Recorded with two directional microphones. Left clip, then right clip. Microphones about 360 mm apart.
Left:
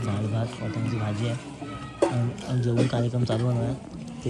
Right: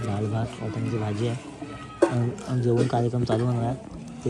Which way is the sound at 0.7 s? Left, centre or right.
Right.